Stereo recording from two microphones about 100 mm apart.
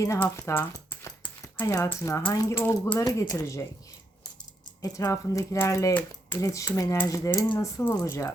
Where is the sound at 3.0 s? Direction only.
35° left (ahead or behind).